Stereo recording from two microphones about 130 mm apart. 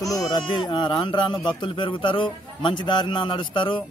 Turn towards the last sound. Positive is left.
turn(degrees=40)  # may be behind; listen again after turning